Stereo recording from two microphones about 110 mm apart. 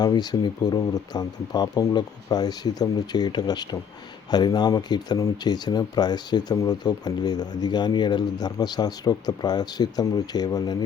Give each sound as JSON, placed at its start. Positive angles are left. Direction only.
{"t": 0.0, "sound": "speech", "side_deg": 40}